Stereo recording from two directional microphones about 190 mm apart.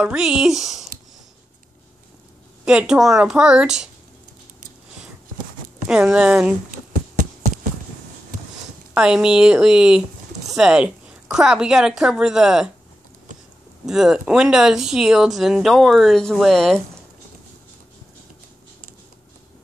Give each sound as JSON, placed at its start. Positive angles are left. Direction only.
{"t": 0.0, "sound": "speech", "side_deg": -5}
{"t": 2.6, "sound": "speech", "side_deg": -5}
{"t": 5.9, "sound": "speech", "side_deg": -5}
{"t": 7.2, "sound": "clip-clop", "side_deg": -45}
{"t": 8.9, "sound": "speech", "side_deg": -5}
{"t": 13.8, "sound": "speech", "side_deg": -5}